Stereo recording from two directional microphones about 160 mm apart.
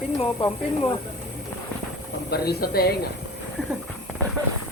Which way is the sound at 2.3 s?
75° left (ahead or behind).